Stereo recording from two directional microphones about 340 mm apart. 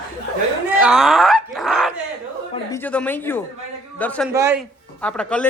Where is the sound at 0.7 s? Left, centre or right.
Centre.